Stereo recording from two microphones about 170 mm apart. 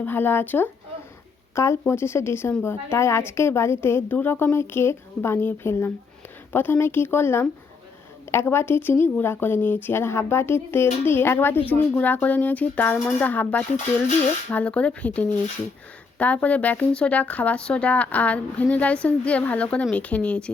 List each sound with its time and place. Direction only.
0.0 s speech: 10° left (ahead or behind)